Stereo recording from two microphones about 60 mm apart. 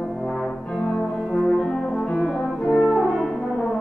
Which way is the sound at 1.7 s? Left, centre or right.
Centre.